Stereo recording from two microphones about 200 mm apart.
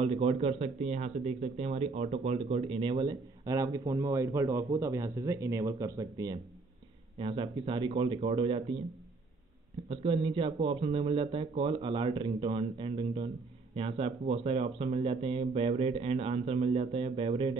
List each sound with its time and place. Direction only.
0.0 s speech: 30° right (ahead or behind)
9.8 s speech: 25° right (ahead or behind)